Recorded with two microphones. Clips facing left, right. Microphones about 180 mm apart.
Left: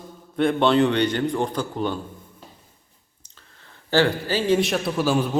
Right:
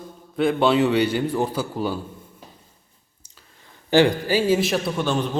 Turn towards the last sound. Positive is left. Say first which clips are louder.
# left 1 dB
turn(degrees=5)  # may be behind; listen again after turning